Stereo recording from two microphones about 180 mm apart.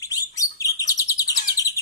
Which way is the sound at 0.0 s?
20° left (ahead or behind).